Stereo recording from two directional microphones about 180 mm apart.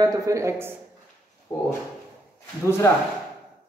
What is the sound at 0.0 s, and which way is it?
Speech, 20° right (ahead or behind).